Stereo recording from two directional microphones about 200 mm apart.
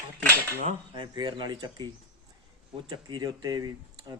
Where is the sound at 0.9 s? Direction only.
25° right (ahead or behind).